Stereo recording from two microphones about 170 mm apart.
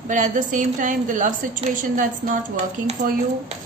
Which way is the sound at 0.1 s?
45° right (ahead or behind).